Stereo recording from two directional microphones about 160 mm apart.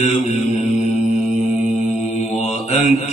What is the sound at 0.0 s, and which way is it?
Mantra, 50° left (ahead or behind).